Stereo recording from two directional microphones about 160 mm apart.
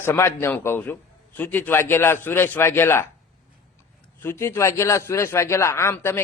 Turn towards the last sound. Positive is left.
turn(degrees=15)  # may be behind; listen again after turning